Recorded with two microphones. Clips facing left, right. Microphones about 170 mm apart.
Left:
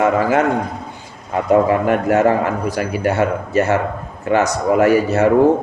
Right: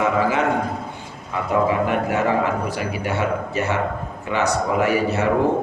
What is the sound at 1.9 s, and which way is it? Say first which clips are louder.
A man's voice: left 6 dB; 45° left (ahead or behind).